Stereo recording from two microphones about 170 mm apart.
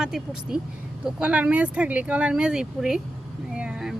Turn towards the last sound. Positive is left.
turn(degrees=-5)  # may be behind; listen again after turning